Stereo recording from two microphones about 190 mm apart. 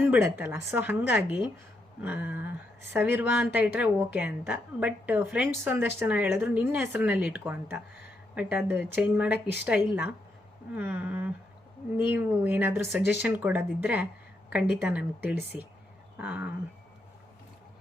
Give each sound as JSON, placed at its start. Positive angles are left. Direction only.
{"t": 0.1, "sound": "speech", "side_deg": -10}